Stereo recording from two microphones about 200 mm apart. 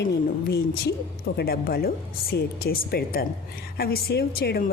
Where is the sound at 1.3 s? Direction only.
55° left (ahead or behind).